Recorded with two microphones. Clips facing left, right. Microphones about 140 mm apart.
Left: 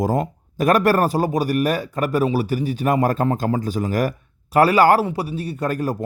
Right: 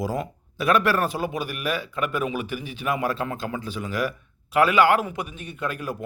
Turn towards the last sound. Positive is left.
turn(degrees=40)  # may be behind; listen again after turning